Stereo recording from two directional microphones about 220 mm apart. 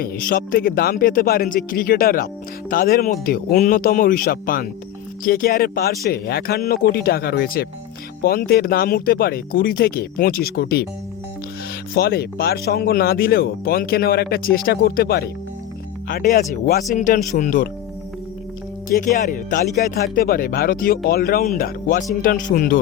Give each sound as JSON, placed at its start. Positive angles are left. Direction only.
{"t": 0.0, "sound": "speech", "side_deg": 40}
{"t": 11.9, "sound": "speech", "side_deg": 45}
{"t": 18.9, "sound": "speech", "side_deg": 40}